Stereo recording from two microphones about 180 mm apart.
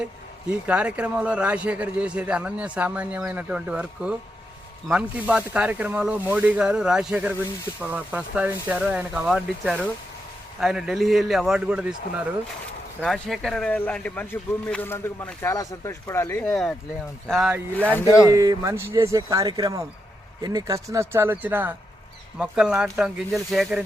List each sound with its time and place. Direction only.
0.6 s a man's voice: 5° right (ahead or behind); by 16.6 s 15° left (ahead or behind)
17.2 s a man's voice: centre (ahead or behind)
17.9 s speech: 15° left (ahead or behind)
18.3 s a man's voice: 20° right (ahead or behind); by 23.8 s centre (ahead or behind)